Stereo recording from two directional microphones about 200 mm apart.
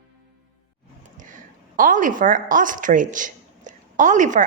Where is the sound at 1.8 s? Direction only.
40° right (ahead or behind).